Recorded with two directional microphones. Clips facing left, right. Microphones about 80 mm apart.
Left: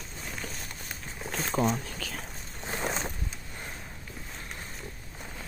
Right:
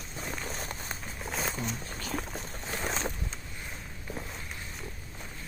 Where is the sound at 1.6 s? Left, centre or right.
Left.